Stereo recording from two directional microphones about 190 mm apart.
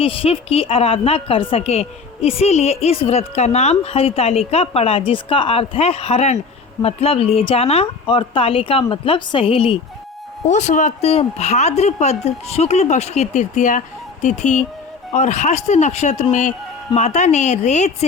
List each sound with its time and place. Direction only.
0.0 s a woman's voice: 30° left (ahead or behind)